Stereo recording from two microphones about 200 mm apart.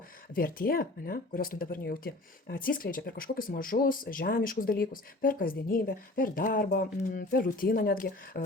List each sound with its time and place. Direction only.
0.3 s speech: 45° left (ahead or behind)